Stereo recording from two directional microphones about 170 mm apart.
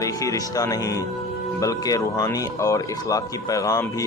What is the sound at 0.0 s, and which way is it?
Speech, 20° left (ahead or behind).